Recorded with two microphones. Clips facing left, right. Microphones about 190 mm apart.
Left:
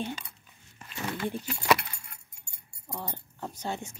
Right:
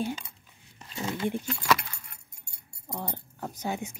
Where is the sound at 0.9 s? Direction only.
20° right (ahead or behind).